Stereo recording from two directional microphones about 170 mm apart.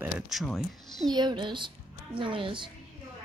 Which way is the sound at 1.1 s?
25° right (ahead or behind).